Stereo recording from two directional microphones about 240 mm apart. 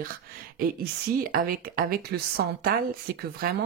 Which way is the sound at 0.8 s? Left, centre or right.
Right.